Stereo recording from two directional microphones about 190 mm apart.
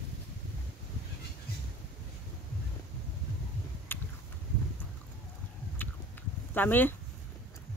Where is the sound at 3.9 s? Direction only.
10° left (ahead or behind).